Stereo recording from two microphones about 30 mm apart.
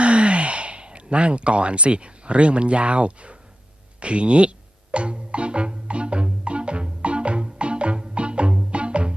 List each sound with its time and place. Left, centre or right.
0.0 s speech: right
4.0 s music: right